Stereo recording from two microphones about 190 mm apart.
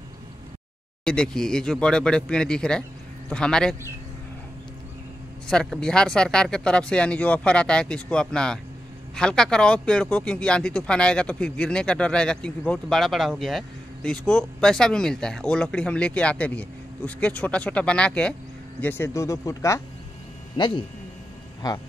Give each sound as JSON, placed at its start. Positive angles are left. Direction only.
{"t": 1.0, "sound": "speech", "side_deg": 5}
{"t": 5.5, "sound": "speech", "side_deg": 5}